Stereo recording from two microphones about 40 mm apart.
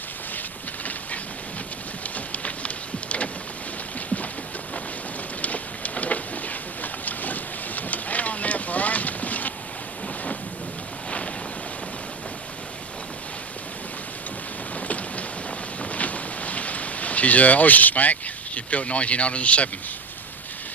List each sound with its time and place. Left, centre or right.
2.0 s rain: left
5.4 s a sound: left
14.8 s vehicle: left